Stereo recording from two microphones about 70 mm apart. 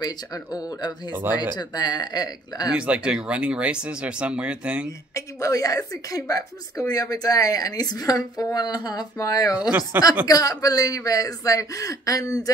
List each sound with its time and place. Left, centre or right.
0.0 s speech: left
2.7 s speech: centre
5.1 s speech: left
9.6 s speech: centre
10.2 s speech: left